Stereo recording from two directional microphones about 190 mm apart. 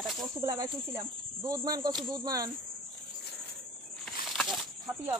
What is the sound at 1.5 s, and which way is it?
Speech, 20° right (ahead or behind).